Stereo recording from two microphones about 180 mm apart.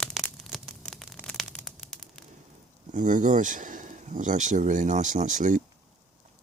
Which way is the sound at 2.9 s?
45° right (ahead or behind).